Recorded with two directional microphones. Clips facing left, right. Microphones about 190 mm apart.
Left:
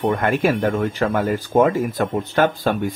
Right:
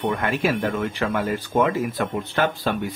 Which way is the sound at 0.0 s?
45° left (ahead or behind).